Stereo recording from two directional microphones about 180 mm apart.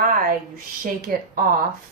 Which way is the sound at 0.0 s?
50° right (ahead or behind).